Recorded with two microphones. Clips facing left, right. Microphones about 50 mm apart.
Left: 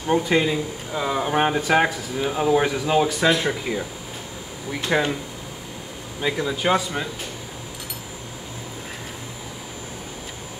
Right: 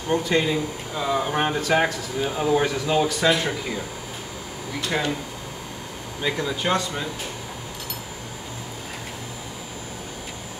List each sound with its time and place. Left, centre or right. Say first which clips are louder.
0.1 s speech: left 2 dB; centre
4.8 s speech: left 4 dB; centre
6.2 s speech: left 2 dB; centre